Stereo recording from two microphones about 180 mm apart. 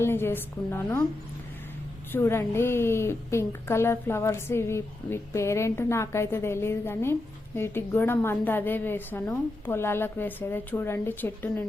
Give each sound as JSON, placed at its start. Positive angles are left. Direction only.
{"t": 0.0, "sound": "a woman's voice", "side_deg": 15}
{"t": 2.1, "sound": "a woman's voice", "side_deg": 15}